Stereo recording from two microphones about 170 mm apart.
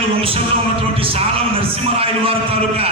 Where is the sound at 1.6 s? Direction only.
35° right (ahead or behind).